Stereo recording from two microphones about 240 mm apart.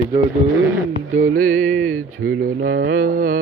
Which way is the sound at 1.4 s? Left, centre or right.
Right.